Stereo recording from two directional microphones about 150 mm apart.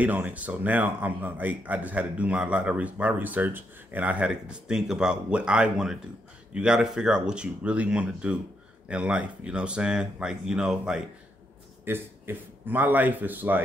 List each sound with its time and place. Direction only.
0.0 s a man's voice: 10° right (ahead or behind)